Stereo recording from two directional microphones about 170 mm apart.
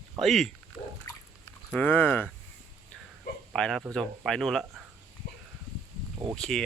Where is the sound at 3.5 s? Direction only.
5° left (ahead or behind).